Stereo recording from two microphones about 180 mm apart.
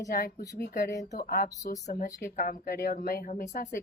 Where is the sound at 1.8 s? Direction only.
40° left (ahead or behind).